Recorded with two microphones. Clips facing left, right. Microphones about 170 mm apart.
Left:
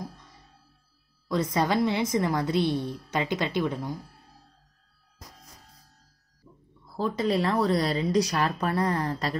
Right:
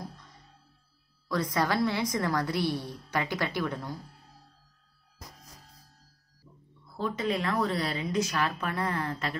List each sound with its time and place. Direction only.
1.3 s a woman's voice: 25° left (ahead or behind)
7.0 s speech: 35° left (ahead or behind)